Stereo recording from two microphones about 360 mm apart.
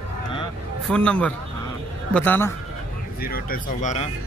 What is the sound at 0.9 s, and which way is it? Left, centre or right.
Speech, centre.